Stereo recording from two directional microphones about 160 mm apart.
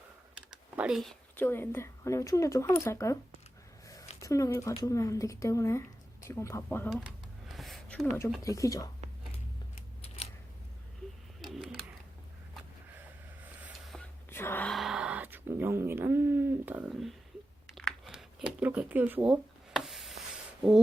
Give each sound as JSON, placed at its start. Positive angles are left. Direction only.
{"t": 0.5, "sound": "typing", "side_deg": -5}
{"t": 1.4, "sound": "speech", "side_deg": 15}
{"t": 4.2, "sound": "a woman's voice", "side_deg": 20}
{"t": 6.9, "sound": "a sound", "side_deg": 0}
{"t": 8.4, "sound": "a woman's voice", "side_deg": 20}
{"t": 14.3, "sound": "gasp", "side_deg": 15}
{"t": 14.7, "sound": "a sound", "side_deg": 0}